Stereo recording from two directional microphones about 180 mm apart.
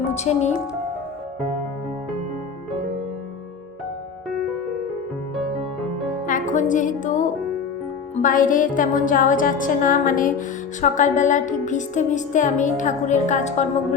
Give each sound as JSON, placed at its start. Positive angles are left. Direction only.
{"t": 0.1, "sound": "speech", "side_deg": 40}
{"t": 4.3, "sound": "music", "side_deg": 0}
{"t": 6.2, "sound": "a woman's voice", "side_deg": 45}
{"t": 8.1, "sound": "music", "side_deg": 45}